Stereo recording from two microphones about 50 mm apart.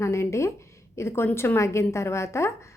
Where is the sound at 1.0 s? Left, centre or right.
Left.